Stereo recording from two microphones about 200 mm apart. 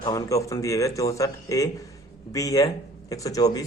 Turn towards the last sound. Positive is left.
turn(degrees=15)  # may be behind; listen again after turning